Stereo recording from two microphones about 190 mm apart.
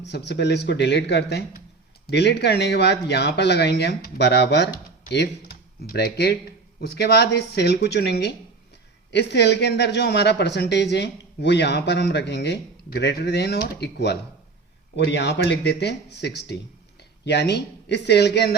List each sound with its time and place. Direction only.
0.0 s speech: 65° left (ahead or behind)